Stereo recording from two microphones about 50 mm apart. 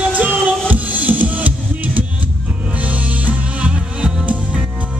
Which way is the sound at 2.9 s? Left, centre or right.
Right.